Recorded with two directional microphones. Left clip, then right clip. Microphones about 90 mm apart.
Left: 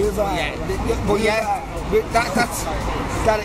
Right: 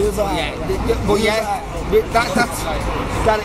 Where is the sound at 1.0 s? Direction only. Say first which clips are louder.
Right 1 dB; 15° left (ahead or behind).